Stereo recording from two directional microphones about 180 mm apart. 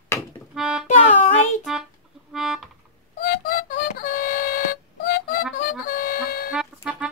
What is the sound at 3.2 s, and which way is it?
Music, 55° left (ahead or behind).